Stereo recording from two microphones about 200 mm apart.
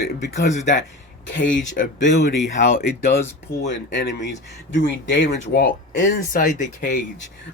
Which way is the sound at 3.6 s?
65° left (ahead or behind).